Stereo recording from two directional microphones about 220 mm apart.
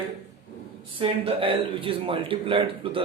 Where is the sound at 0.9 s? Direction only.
25° right (ahead or behind).